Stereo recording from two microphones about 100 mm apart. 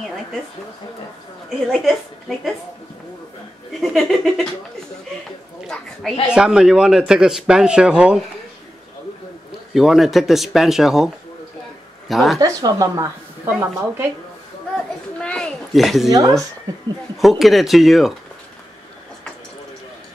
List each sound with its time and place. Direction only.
1.7 s speech: centre (ahead or behind)
3.8 s speech: centre (ahead or behind)
5.7 s speech: 5° left (ahead or behind)
6.3 s a man's voice: 10° right (ahead or behind)
9.8 s speech: 5° right (ahead or behind)
12.1 s speech: centre (ahead or behind)
12.4 s speech: 35° right (ahead or behind)
15.1 s speech: 10° left (ahead or behind)
16.1 s speech: 40° right (ahead or behind)
17.2 s speech: centre (ahead or behind)